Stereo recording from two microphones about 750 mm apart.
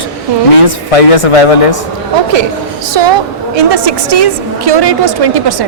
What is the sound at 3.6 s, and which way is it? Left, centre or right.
A woman's voice, right.